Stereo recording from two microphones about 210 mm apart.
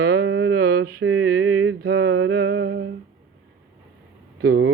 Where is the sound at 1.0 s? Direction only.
65° right (ahead or behind).